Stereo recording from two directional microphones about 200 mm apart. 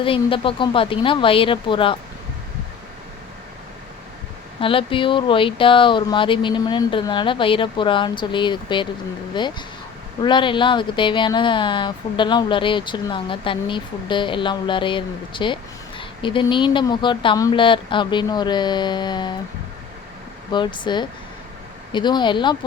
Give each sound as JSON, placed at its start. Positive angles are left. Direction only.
{"t": 0.0, "sound": "speech", "side_deg": 25}
{"t": 4.6, "sound": "speech", "side_deg": 25}
{"t": 20.5, "sound": "speech", "side_deg": 25}